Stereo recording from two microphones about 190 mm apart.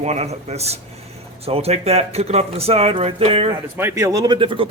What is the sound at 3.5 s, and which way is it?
Speech, 15° right (ahead or behind).